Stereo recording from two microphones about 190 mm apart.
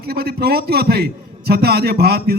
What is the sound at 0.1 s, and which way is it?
A man's voice, 55° right (ahead or behind).